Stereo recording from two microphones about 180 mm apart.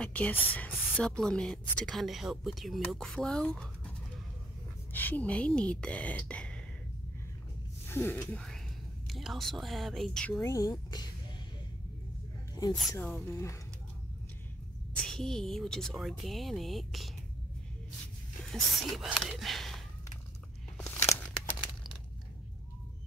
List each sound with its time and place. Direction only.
0.0 s a woman's voice: 10° left (ahead or behind)
4.9 s speech: 10° left (ahead or behind)
7.9 s a woman's voice: 10° left (ahead or behind)
10.4 s speech: 15° left (ahead or behind)
12.9 s speech: 10° left (ahead or behind)
15.0 s a woman's voice: 5° left (ahead or behind)
18.5 s speech: centre (ahead or behind)
20.7 s crumpling: 15° left (ahead or behind)